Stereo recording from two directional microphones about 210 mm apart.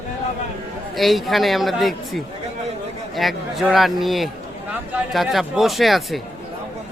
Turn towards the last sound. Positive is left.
turn(degrees=0)  # may be behind; listen again after turning